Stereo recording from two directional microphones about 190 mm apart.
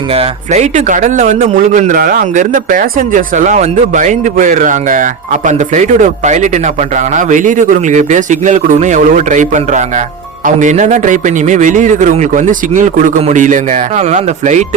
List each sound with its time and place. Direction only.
0.1 s speech: 35° right (ahead or behind)